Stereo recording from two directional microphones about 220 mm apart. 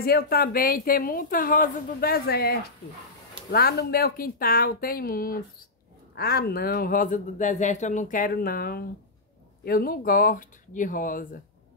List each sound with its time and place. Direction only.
0.0 s a woman's voice: 45° left (ahead or behind)